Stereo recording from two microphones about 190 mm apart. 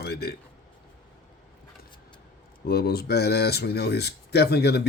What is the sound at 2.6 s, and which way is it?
Speech, 55° left (ahead or behind).